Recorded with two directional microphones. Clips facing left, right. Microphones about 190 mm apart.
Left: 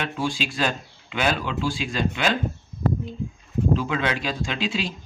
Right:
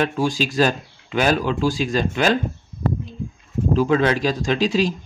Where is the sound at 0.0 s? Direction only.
40° right (ahead or behind).